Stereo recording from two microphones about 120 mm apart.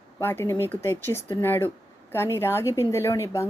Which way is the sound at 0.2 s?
20° left (ahead or behind).